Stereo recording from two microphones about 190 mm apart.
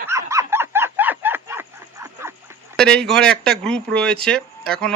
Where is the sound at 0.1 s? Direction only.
15° right (ahead or behind).